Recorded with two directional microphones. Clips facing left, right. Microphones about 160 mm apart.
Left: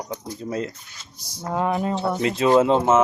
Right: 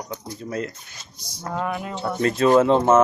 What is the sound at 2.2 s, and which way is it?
Speech, 15° left (ahead or behind).